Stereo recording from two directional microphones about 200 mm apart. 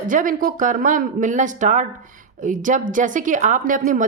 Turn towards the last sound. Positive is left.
turn(degrees=-40)  # may be behind; listen again after turning